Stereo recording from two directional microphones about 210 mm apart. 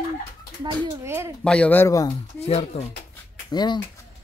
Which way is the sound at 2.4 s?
30° left (ahead or behind).